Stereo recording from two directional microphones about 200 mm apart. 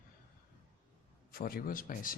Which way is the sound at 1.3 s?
50° left (ahead or behind).